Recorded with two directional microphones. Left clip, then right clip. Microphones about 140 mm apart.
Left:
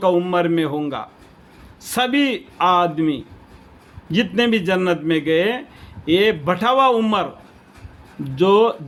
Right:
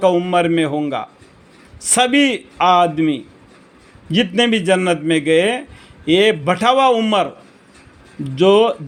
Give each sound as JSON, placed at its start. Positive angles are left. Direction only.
{"t": 0.0, "sound": "a man's voice", "side_deg": -20}